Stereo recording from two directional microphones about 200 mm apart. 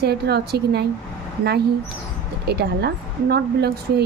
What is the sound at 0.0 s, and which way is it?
Speech, 55° right (ahead or behind).